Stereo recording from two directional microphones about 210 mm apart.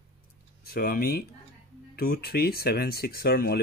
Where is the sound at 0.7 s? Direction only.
45° left (ahead or behind).